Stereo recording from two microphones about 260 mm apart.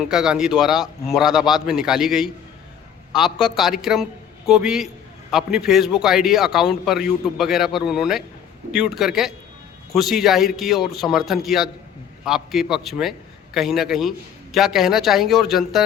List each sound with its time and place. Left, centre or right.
0.1 s a man's voice: centre